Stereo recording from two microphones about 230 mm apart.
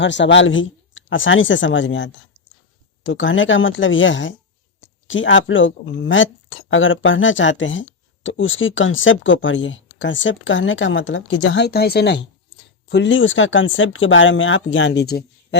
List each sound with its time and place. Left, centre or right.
0.0 s speech: left